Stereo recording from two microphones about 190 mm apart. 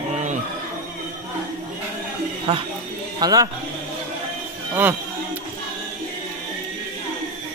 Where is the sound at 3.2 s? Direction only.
20° right (ahead or behind).